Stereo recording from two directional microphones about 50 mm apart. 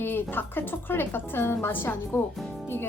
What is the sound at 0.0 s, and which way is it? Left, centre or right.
A woman's voice, left.